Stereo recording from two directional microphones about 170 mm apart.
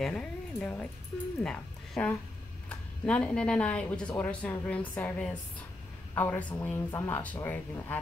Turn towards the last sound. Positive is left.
turn(degrees=10)  # may be behind; listen again after turning